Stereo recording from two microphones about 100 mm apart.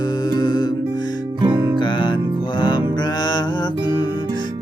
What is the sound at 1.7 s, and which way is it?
Music, 50° left (ahead or behind).